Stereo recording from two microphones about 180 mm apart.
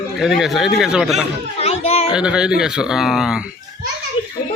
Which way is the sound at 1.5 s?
35° left (ahead or behind).